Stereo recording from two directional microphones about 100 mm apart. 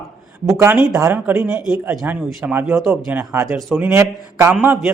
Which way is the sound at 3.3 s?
30° right (ahead or behind).